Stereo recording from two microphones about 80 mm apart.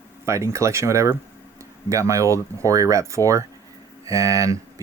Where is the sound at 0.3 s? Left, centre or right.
Right.